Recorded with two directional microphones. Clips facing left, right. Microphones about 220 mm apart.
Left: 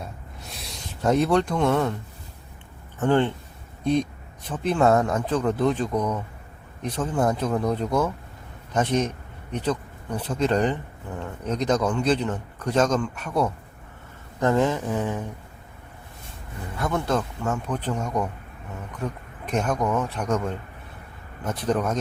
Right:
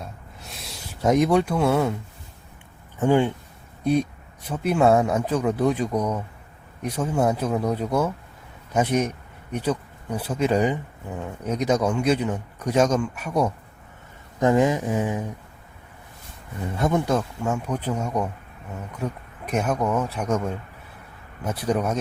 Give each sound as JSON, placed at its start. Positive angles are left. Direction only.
{"t": 0.0, "sound": "a sound", "side_deg": 0}
{"t": 1.0, "sound": "speech", "side_deg": -10}
{"t": 3.0, "sound": "speech", "side_deg": -10}
{"t": 16.7, "sound": "speech", "side_deg": -20}
{"t": 17.1, "sound": "speech", "side_deg": -10}